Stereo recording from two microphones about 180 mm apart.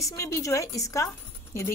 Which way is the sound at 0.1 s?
15° left (ahead or behind).